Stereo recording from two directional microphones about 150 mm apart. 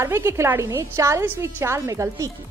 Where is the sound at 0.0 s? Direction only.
20° right (ahead or behind).